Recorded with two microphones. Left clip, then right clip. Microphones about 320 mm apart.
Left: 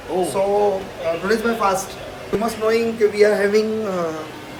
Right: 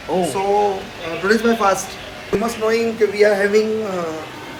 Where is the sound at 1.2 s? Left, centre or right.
Centre.